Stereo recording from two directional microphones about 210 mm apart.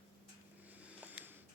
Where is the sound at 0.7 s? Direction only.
5° right (ahead or behind).